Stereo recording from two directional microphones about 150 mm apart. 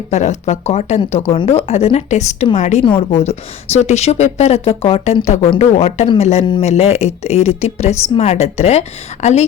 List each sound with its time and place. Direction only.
0.1 s a woman's voice: 50° left (ahead or behind)
2.8 s a woman's voice: 35° left (ahead or behind)
6.4 s speech: 30° left (ahead or behind)
6.7 s a woman's voice: 45° left (ahead or behind)